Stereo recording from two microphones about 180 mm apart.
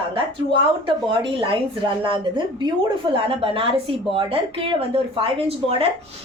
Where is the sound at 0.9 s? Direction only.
30° right (ahead or behind).